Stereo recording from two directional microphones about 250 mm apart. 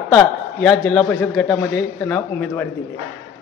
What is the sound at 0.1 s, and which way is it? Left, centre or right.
A man's voice, centre.